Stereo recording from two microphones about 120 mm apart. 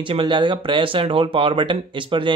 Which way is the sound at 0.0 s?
45° right (ahead or behind).